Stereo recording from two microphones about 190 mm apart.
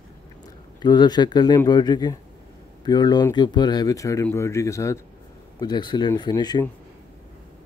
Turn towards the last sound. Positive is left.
turn(degrees=20)  # may be behind; listen again after turning